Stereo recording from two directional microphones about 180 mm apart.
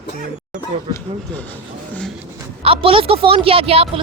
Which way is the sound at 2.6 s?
30° right (ahead or behind).